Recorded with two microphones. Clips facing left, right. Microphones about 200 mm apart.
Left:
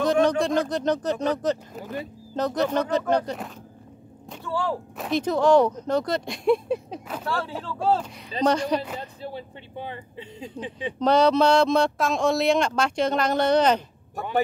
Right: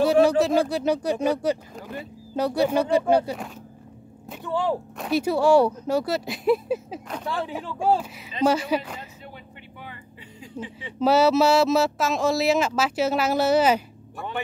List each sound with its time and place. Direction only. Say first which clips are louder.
0.0 s speech: right 3 dB; 10° right (ahead or behind)
4.4 s speech: right 2 dB; 20° right (ahead or behind)
4.9 s speech: left 1 dB; 5° right (ahead or behind)
7.2 s speech: even; 15° right (ahead or behind)
9.2 s vehicle: left 7 dB; 30° left (ahead or behind)
10.4 s speech: left 3 dB; 20° left (ahead or behind)
11.0 s speech: right 1 dB; 5° right (ahead or behind)